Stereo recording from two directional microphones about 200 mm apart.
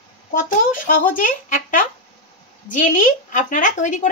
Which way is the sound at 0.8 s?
40° left (ahead or behind).